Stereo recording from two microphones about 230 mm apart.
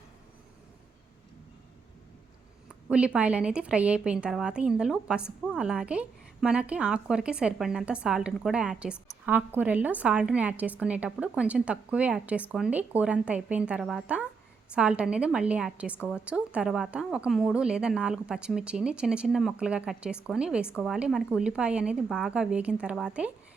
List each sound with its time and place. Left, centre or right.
2.9 s a woman's voice: centre